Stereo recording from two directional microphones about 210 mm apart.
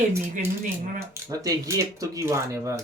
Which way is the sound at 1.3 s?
15° right (ahead or behind).